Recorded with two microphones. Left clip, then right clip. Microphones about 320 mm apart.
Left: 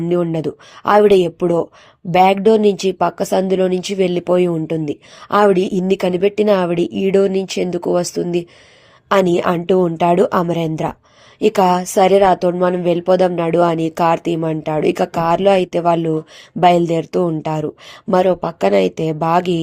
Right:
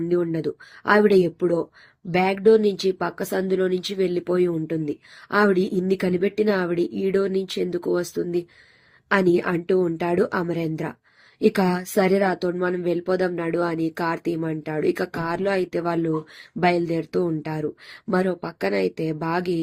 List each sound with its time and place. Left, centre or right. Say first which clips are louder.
0.1 s speech: left 7 dB; left